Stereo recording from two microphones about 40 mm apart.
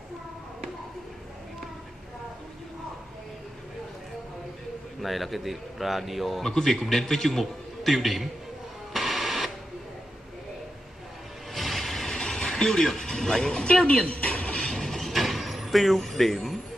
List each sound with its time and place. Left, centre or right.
5.0 s speech: centre
6.4 s a man's voice: centre
8.9 s printer: centre
11.5 s music: centre
12.4 s mechanisms: centre
12.8 s speech: centre
13.7 s speech: left
14.0 s a sound: left
14.7 s train: centre
15.2 s vehicle: centre